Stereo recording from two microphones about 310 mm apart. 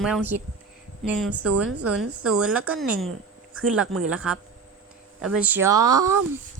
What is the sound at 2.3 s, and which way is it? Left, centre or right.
Speech, centre.